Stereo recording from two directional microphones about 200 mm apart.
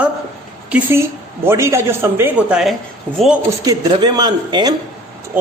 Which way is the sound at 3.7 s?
20° right (ahead or behind).